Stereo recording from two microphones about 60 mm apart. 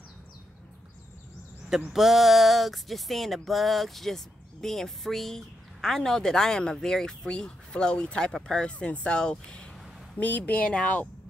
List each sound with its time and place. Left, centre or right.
1.9 s a sound: centre
8.4 s speech: centre
10.1 s speech: left